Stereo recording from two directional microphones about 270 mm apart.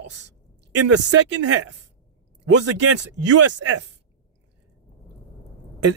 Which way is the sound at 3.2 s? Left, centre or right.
Right.